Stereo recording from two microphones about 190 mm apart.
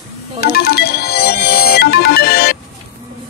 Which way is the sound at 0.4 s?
55° left (ahead or behind).